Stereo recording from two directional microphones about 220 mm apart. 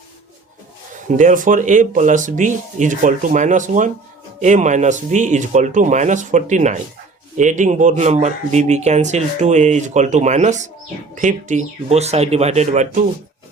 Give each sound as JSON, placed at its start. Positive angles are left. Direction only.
{"t": 1.0, "sound": "speech", "side_deg": -35}